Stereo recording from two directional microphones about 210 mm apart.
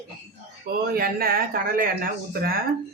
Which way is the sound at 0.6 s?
45° right (ahead or behind).